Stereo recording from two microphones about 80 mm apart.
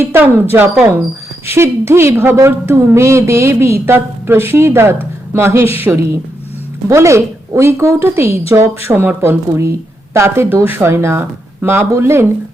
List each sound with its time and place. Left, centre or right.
0.0 s a woman's voice: right